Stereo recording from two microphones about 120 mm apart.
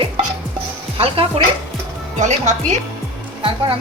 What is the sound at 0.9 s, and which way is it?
Speech, 50° right (ahead or behind).